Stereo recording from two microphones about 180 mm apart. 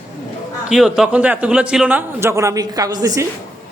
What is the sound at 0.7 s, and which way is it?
A man's voice, 5° right (ahead or behind).